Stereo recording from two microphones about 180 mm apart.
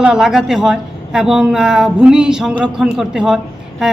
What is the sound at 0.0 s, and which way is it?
A woman's voice, 5° right (ahead or behind).